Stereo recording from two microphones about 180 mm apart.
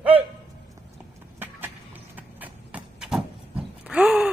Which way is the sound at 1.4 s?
10° right (ahead or behind).